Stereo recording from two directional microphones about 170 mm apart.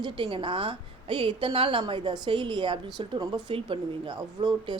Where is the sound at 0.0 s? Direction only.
30° right (ahead or behind).